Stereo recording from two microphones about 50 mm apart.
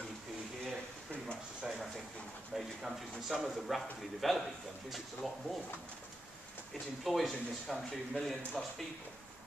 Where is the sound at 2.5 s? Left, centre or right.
Centre.